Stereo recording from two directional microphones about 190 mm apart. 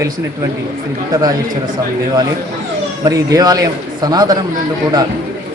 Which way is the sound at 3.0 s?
20° right (ahead or behind).